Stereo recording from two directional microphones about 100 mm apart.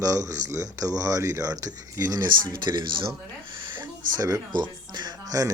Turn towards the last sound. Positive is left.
turn(degrees=-35)  # may be behind; listen again after turning